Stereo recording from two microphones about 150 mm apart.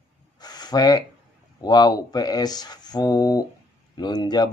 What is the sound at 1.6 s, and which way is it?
Speech, 25° left (ahead or behind).